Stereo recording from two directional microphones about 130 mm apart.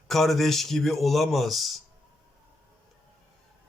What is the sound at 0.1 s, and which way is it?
Speech, centre (ahead or behind).